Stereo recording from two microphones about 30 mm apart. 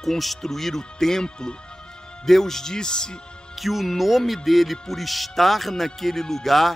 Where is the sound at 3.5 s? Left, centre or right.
Centre.